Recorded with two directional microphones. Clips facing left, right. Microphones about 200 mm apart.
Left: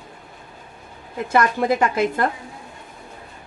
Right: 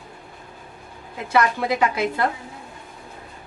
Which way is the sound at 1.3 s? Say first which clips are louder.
Left 2 dB; 50° left (ahead or behind).